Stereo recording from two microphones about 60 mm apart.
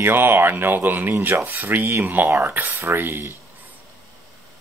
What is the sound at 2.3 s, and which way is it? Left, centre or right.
Speech, right.